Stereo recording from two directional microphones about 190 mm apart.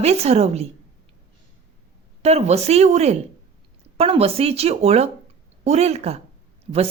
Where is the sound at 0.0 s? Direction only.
35° right (ahead or behind).